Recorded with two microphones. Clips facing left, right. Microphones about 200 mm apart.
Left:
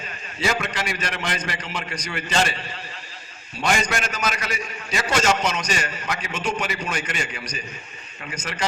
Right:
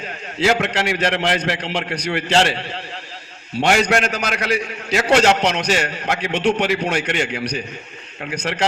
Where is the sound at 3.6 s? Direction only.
70° right (ahead or behind).